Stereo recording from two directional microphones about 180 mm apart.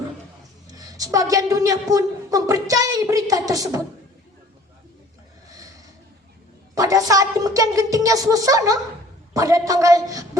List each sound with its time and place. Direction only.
0.7 s a woman's voice: 20° right (ahead or behind)
5.5 s vehicle: 20° right (ahead or behind)
6.7 s a woman's voice: 20° right (ahead or behind)